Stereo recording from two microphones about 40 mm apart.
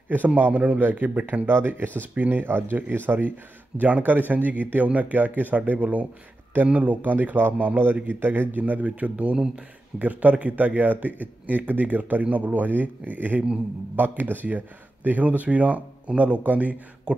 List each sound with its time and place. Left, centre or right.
0.4 s speech: right
1.5 s speech: right
2.0 s speech: right